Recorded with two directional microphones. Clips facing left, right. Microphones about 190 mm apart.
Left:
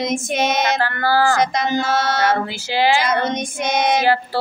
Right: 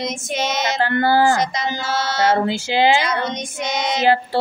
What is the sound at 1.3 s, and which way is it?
Speech, 55° left (ahead or behind).